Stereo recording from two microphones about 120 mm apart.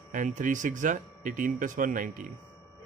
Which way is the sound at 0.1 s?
90° right.